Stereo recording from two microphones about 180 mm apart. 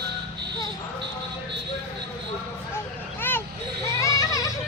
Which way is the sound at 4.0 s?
20° left (ahead or behind).